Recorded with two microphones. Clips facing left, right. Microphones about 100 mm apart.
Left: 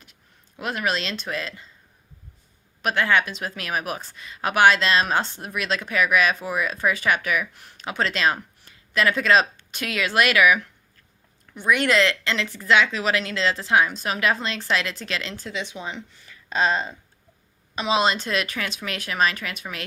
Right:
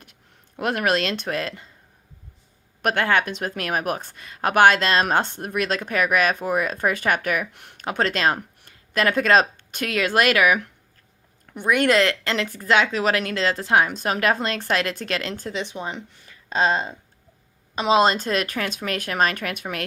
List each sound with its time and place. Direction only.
0.0 s speech: 55° right (ahead or behind)
2.8 s a woman's voice: 55° right (ahead or behind)
16.2 s speech: 25° right (ahead or behind)
17.8 s a woman's voice: 45° right (ahead or behind)